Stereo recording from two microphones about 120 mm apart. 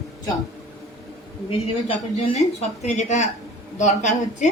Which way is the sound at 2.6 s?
75° left (ahead or behind).